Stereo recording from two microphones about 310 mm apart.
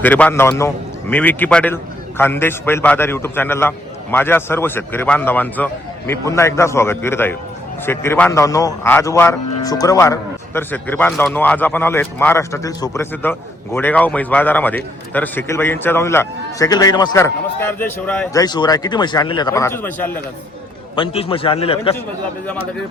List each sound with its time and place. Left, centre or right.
0.0 s a man's voice: centre
20.9 s a man's voice: centre